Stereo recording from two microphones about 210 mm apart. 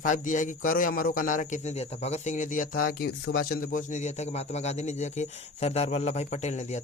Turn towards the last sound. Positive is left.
turn(degrees=35)  # may be behind; listen again after turning